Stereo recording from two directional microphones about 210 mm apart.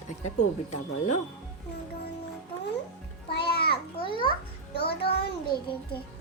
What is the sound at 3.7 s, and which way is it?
Babbling, 25° left (ahead or behind).